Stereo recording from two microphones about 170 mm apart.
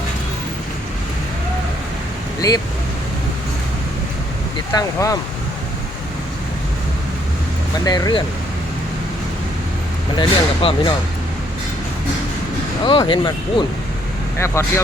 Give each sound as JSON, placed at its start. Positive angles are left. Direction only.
{"t": 2.4, "sound": "speech", "side_deg": 20}
{"t": 4.7, "sound": "speech", "side_deg": 20}
{"t": 7.9, "sound": "speech", "side_deg": 25}
{"t": 10.2, "sound": "speech", "side_deg": 30}
{"t": 12.8, "sound": "speech", "side_deg": 30}
{"t": 14.3, "sound": "speech", "side_deg": 15}